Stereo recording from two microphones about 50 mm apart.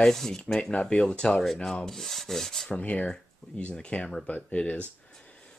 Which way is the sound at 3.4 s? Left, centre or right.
Centre.